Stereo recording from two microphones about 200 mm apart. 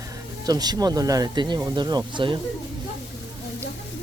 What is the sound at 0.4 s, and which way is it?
Speech, 20° right (ahead or behind).